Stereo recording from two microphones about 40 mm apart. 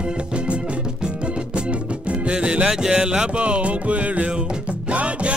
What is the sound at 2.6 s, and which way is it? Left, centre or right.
Music, centre.